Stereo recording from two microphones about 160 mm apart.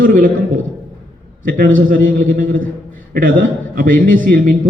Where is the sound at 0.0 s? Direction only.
60° right (ahead or behind).